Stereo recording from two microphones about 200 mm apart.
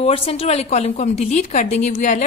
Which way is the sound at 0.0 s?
30° left (ahead or behind).